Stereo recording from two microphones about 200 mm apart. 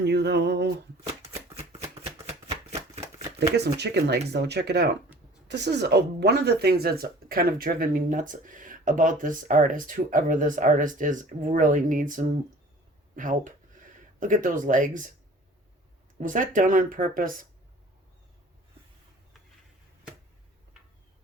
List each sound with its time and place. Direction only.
0.0 s speech: 60° right (ahead or behind)
2.2 s chopping: 35° right (ahead or behind)
3.5 s speech: 55° right (ahead or behind)
16.2 s speech: 40° right (ahead or behind)